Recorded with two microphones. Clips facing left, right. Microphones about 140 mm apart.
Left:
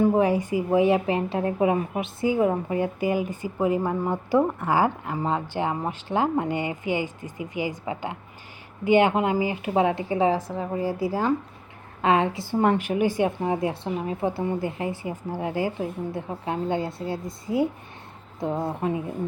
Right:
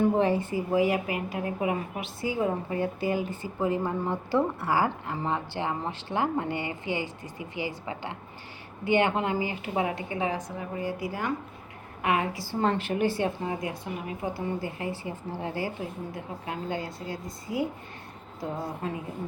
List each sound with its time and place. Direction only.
0.0 s a woman's voice: 10° left (ahead or behind)